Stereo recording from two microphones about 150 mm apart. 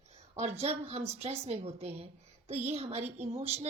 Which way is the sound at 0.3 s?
45° right (ahead or behind).